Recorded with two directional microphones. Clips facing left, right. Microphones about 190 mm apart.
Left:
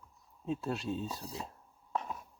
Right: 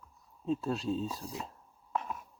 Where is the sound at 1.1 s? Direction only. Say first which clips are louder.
Right 1 dB; 30° left (ahead or behind).